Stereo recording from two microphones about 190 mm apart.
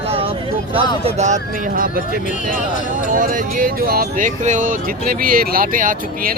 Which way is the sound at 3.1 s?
45° right (ahead or behind).